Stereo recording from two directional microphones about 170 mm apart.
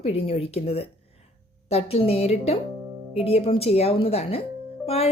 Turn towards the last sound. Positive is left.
turn(degrees=35)  # may be behind; listen again after turning